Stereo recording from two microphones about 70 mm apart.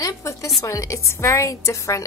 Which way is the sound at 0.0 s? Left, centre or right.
Left.